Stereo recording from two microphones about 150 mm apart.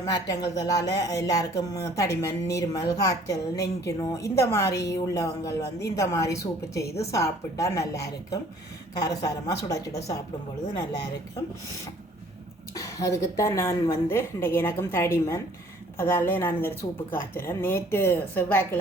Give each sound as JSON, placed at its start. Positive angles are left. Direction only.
{"t": 0.0, "sound": "a woman's voice", "side_deg": 25}
{"t": 12.7, "sound": "a woman's voice", "side_deg": 20}